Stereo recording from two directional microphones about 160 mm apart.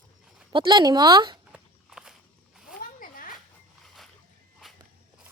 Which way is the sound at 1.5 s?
5° right (ahead or behind).